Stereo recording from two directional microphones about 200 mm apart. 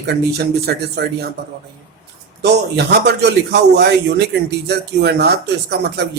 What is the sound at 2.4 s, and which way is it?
A man's voice, 55° right (ahead or behind).